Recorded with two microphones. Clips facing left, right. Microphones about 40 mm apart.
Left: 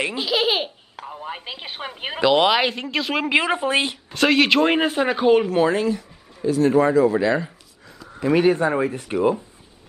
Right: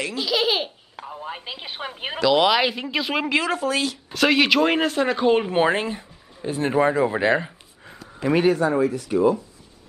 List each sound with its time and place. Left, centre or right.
0.0 s speech: left
2.7 s speech: centre
3.3 s speech: left
4.1 s speech: centre
5.5 s speech: right
8.5 s speech: left